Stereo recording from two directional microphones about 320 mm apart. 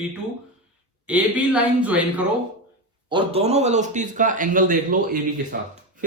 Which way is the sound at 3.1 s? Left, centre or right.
Centre.